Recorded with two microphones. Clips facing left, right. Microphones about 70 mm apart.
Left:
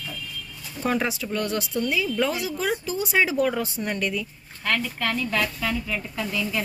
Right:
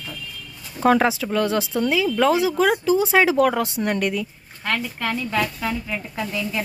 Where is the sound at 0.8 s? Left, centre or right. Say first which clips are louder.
Right 8 dB; right.